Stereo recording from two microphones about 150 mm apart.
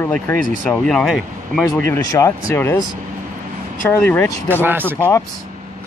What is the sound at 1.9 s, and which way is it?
Speech, 25° left (ahead or behind).